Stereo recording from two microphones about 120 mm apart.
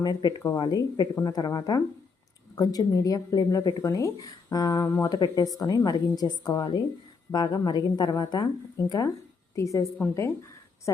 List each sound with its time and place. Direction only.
0.0 s a woman's voice: 35° left (ahead or behind)
10.9 s a woman's voice: 25° left (ahead or behind)